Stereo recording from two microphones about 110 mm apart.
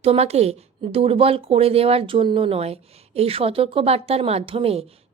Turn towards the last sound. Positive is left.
turn(degrees=-60)  # may be behind; listen again after turning